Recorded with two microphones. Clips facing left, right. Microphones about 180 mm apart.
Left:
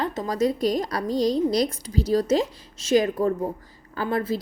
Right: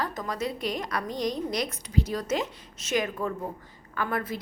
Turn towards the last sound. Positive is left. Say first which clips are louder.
# left 5 dB
turn(degrees=30)  # may be behind; listen again after turning